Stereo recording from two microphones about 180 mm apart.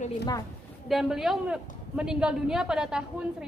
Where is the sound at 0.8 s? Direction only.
Centre (ahead or behind).